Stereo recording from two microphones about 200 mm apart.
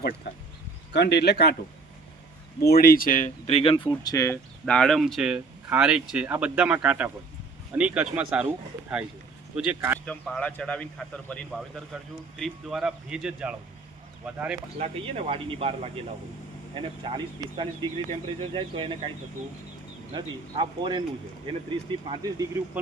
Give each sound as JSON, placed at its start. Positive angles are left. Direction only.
{"t": 0.9, "sound": "speech", "side_deg": 55}
{"t": 2.6, "sound": "speech", "side_deg": 45}
{"t": 3.8, "sound": "speech", "side_deg": 15}
{"t": 4.6, "sound": "speech", "side_deg": 5}
{"t": 9.6, "sound": "speech", "side_deg": -10}
{"t": 10.1, "sound": "speech", "side_deg": 5}
{"t": 14.8, "sound": "speech", "side_deg": -30}
{"t": 20.1, "sound": "speech", "side_deg": -25}